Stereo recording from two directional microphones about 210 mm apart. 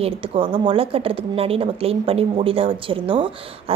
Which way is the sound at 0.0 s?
25° right (ahead or behind).